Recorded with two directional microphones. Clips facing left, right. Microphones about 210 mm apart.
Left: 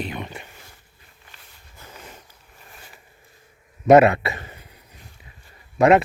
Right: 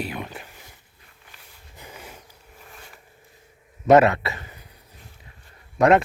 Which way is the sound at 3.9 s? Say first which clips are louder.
Left 2 dB; 10° left (ahead or behind).